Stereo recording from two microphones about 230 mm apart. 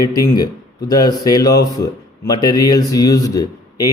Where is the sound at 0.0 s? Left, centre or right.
Centre.